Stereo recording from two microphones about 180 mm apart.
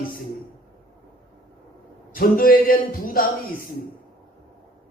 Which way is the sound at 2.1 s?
55° left (ahead or behind).